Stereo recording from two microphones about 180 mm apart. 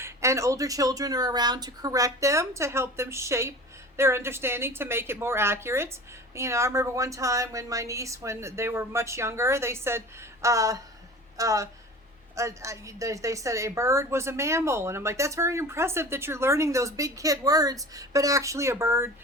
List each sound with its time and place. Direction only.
0.0 s a woman's voice: 15° right (ahead or behind)